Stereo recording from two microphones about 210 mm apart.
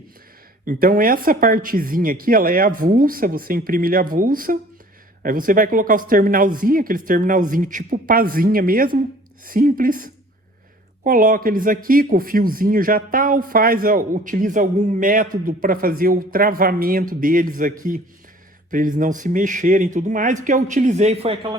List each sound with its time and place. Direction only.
0.6 s speech: 40° right (ahead or behind)